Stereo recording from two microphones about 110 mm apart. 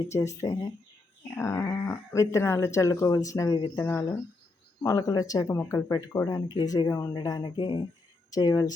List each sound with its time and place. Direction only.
0.1 s speech: 30° left (ahead or behind); by 7.8 s 45° left (ahead or behind)
8.3 s speech: 35° left (ahead or behind)